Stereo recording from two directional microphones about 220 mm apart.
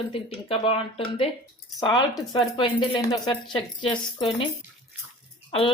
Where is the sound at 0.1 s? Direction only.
25° left (ahead or behind).